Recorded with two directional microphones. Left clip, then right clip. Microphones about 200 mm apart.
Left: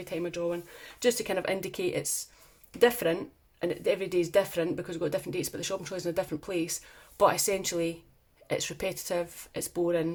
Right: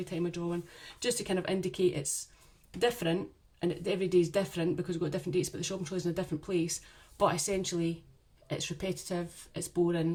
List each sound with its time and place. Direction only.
0.0 s speech: 30° left (ahead or behind)